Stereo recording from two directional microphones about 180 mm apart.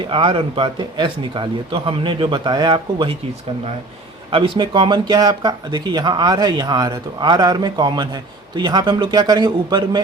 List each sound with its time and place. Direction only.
0.1 s speech: 30° right (ahead or behind)
4.3 s speech: 30° right (ahead or behind)